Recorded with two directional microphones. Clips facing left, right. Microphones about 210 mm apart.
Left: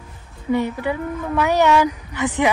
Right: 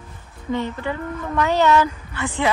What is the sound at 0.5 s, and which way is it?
A woman's voice, 10° left (ahead or behind).